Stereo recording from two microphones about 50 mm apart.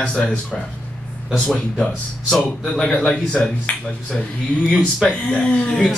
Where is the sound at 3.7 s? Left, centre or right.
Left.